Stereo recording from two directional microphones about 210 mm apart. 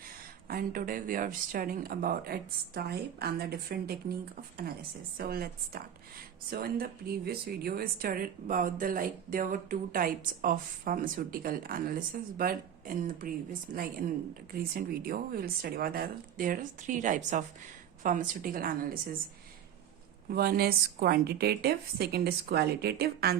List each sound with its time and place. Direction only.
0.4 s a woman's voice: 45° right (ahead or behind)
5.1 s a woman's voice: 45° right (ahead or behind)
20.3 s a woman's voice: 45° right (ahead or behind)